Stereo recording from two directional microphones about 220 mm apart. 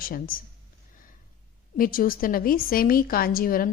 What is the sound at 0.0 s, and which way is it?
Speech, 40° left (ahead or behind).